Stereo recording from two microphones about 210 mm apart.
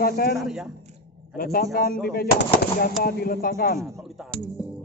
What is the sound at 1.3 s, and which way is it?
Speech, 45° left (ahead or behind).